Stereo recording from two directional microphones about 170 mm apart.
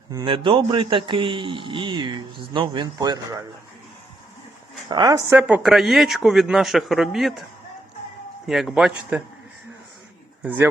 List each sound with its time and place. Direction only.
0.1 s speech: 20° right (ahead or behind)
4.9 s speech: 20° right (ahead or behind)
5.4 s speech: 5° right (ahead or behind)
8.4 s a man's voice: centre (ahead or behind)